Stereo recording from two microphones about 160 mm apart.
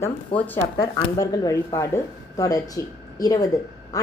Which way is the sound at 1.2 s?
20° left (ahead or behind).